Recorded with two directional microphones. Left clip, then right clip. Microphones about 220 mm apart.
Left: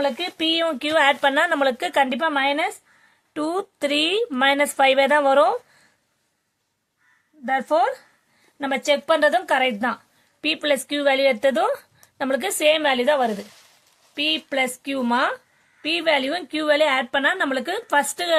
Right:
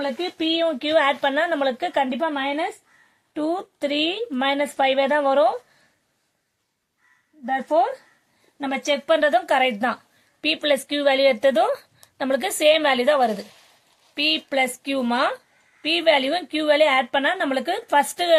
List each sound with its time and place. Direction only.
0.0 s a woman's voice: 35° left (ahead or behind)
7.4 s a woman's voice: 30° left (ahead or behind)
9.5 s a woman's voice: 10° left (ahead or behind)